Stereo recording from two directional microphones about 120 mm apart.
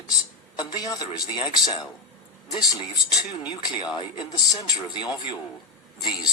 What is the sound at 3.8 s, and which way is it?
A man's voice, 40° left (ahead or behind).